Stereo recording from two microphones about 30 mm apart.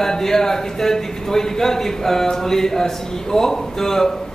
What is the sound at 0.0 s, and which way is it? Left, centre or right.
Speech, centre.